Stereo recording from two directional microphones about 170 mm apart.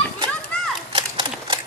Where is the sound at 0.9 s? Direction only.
30° right (ahead or behind).